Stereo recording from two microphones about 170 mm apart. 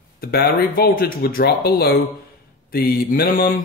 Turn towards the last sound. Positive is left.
turn(degrees=60)  # may be behind; listen again after turning